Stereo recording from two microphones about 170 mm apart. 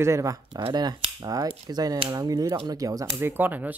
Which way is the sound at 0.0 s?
20° right (ahead or behind).